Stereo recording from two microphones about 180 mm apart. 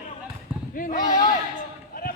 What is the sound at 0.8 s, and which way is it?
Speech, 50° left (ahead or behind).